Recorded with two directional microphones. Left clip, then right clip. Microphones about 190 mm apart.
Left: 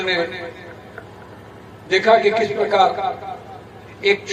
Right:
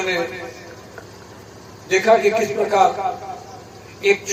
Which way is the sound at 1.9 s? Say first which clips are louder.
Left 1 dB; 35° right (ahead or behind).